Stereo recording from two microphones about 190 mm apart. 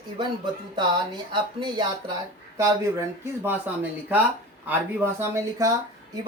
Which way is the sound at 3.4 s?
10° right (ahead or behind).